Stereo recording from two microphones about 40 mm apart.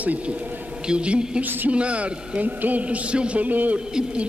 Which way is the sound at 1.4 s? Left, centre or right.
Right.